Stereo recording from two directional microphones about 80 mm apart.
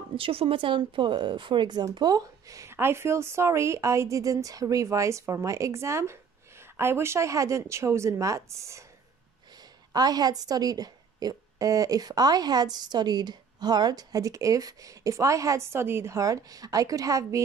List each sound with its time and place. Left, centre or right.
0.1 s speech: right
2.0 s a woman's voice: right
9.9 s a woman's voice: right